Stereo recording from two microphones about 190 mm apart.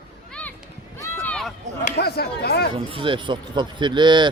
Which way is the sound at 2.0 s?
55° left (ahead or behind).